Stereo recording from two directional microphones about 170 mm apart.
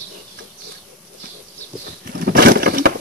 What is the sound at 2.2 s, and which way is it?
Vehicle, 65° right (ahead or behind).